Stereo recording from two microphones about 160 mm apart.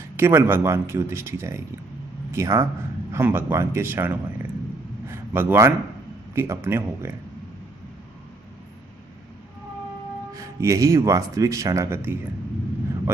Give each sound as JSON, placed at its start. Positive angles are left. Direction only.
{"t": 0.1, "sound": "speech", "side_deg": -15}
{"t": 10.3, "sound": "speech", "side_deg": -20}